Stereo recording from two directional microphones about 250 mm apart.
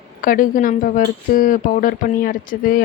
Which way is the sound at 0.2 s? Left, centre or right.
Left.